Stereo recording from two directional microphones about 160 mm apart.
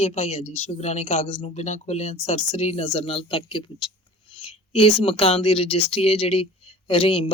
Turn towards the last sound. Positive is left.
turn(degrees=35)  # may be behind; listen again after turning